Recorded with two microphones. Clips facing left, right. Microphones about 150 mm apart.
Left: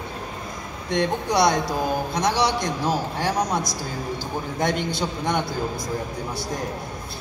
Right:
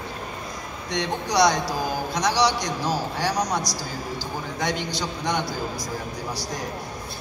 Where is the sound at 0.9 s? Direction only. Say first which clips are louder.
Left 3 dB; 55° left (ahead or behind).